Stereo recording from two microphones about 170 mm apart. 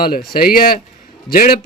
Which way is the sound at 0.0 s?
60° left (ahead or behind).